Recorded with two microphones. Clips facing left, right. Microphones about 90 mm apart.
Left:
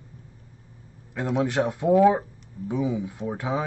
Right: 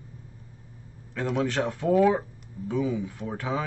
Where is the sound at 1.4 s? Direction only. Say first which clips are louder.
Left 5 dB; 15° left (ahead or behind).